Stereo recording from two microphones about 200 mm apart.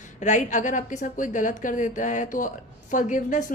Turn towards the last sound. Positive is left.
turn(degrees=40)  # may be behind; listen again after turning